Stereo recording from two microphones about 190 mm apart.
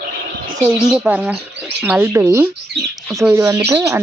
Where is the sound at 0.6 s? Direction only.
5° right (ahead or behind).